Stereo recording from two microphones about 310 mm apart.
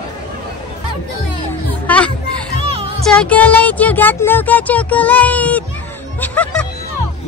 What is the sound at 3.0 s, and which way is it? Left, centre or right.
Speech, centre.